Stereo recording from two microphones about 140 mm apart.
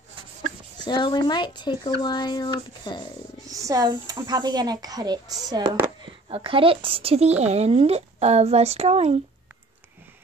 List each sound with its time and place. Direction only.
0.8 s speech: 30° left (ahead or behind)
3.4 s speech: 25° right (ahead or behind)
6.2 s speech: 40° right (ahead or behind)